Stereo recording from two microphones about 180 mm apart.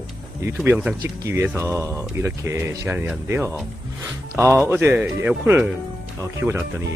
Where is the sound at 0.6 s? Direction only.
5° right (ahead or behind).